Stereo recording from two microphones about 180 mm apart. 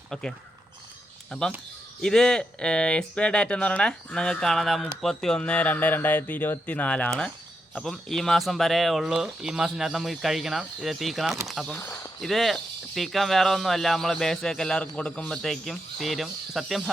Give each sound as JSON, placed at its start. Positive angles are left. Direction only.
{"t": 0.1, "sound": "speech", "side_deg": 5}
{"t": 12.2, "sound": "speech", "side_deg": 0}